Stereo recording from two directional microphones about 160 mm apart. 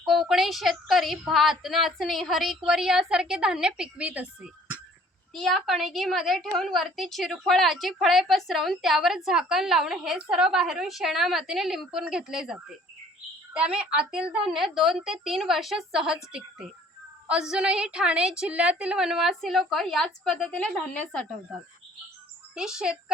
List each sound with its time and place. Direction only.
0.0 s a woman's voice: centre (ahead or behind)
5.3 s a woman's voice: centre (ahead or behind)
22.5 s a woman's voice: 5° right (ahead or behind)